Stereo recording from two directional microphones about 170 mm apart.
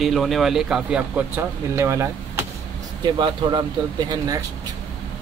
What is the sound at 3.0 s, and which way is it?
A man's voice, 25° right (ahead or behind).